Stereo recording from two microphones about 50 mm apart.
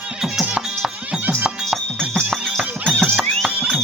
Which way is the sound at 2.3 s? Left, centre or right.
Centre.